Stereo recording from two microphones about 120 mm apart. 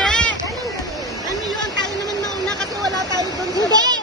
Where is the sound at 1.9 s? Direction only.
30° right (ahead or behind).